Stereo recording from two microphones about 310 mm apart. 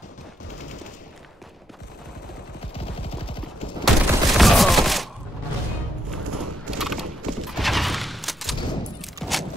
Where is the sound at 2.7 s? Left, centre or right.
Centre.